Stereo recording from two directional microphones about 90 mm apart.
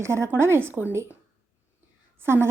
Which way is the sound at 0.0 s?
30° right (ahead or behind).